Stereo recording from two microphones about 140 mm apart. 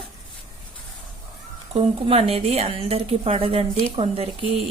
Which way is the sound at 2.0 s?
45° right (ahead or behind).